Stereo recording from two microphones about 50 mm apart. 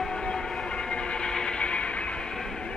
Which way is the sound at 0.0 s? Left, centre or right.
Centre.